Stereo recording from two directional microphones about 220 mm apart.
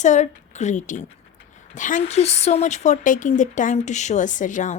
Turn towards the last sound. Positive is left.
turn(degrees=35)  # may be behind; listen again after turning